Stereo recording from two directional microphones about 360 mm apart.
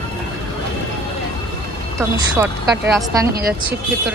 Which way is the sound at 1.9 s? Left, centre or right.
Centre.